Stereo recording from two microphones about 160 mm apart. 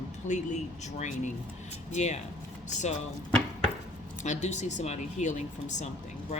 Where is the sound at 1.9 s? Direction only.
45° left (ahead or behind).